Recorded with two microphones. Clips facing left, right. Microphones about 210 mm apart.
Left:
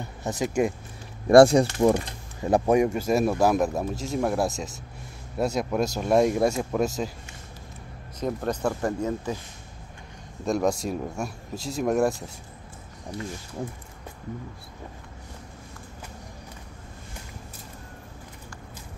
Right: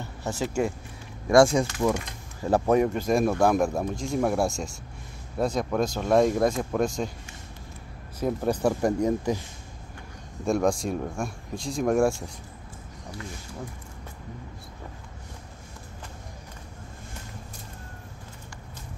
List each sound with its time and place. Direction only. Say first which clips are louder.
0.2 s speech: left 2 dB; 15° left (ahead or behind)
1.3 s speech: left 4 dB; 35° left (ahead or behind)
2.4 s a man's voice: left 1 dB; 15° left (ahead or behind)
8.2 s speech: right 2 dB; 10° right (ahead or behind)
10.4 s a man's voice: right 1 dB; centre (ahead or behind)